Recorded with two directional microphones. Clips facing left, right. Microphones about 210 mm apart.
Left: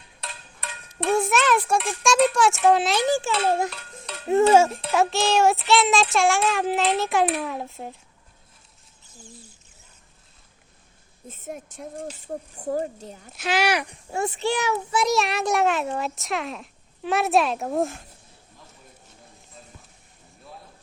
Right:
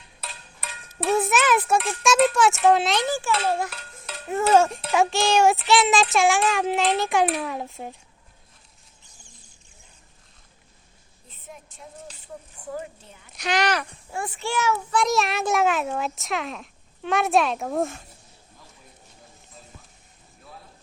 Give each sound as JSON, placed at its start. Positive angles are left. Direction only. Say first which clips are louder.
{"t": 0.2, "sound": "a sound", "louder": "left 1 dB", "side_deg": 0}
{"t": 3.1, "sound": "a child's voice", "louder": "left 3 dB", "side_deg": 20}
{"t": 4.1, "sound": "a sound", "louder": "even", "side_deg": -5}
{"t": 4.5, "sound": "child singing", "louder": "left 1 dB", "side_deg": 5}
{"t": 11.3, "sound": "speech", "louder": "left 9 dB", "side_deg": 45}
{"t": 13.3, "sound": "speech", "louder": "left 1 dB", "side_deg": 5}
{"t": 14.1, "sound": "a child's voice", "louder": "left 5 dB", "side_deg": 25}
{"t": 14.9, "sound": "child singing", "louder": "left 1 dB", "side_deg": 0}